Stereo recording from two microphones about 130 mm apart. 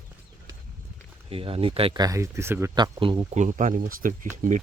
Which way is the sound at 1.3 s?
45° right (ahead or behind).